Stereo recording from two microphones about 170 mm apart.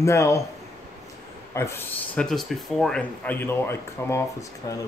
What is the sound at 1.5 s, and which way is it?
Speech, 15° left (ahead or behind).